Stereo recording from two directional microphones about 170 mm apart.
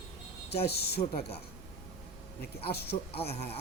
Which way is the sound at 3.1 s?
35° left (ahead or behind).